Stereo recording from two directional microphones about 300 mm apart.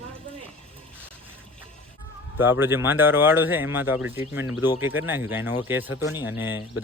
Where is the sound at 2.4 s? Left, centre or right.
Centre.